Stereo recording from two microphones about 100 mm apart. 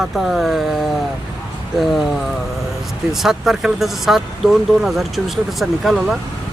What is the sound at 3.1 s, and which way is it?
Speech, 5° right (ahead or behind).